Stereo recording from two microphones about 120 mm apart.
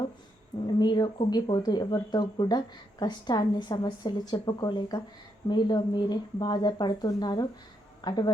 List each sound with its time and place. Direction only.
0.8 s a woman's voice: 35° left (ahead or behind)